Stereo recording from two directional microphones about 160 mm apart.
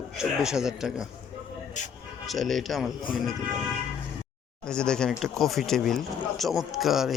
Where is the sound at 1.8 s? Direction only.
50° left (ahead or behind).